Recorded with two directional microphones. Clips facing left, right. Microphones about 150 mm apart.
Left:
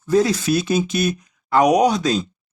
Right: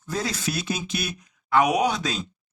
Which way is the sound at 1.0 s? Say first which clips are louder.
Left 11 dB; 40° left (ahead or behind).